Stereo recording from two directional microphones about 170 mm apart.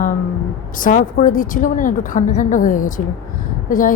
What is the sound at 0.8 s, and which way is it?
A woman's voice, 50° left (ahead or behind).